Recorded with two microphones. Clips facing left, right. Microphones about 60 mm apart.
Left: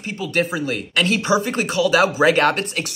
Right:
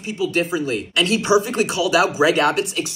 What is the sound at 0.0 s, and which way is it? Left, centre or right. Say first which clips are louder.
Speech: right 1 dB; left.